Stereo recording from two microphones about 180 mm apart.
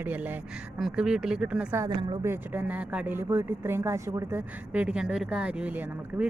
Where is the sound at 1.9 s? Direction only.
25° right (ahead or behind).